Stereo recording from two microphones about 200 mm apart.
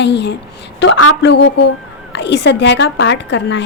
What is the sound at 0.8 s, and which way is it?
A woman's voice, 80° left.